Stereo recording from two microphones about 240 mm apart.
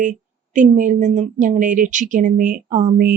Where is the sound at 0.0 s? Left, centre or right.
Right.